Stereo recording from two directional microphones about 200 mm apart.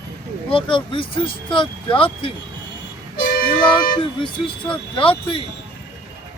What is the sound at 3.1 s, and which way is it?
Music, 50° left (ahead or behind).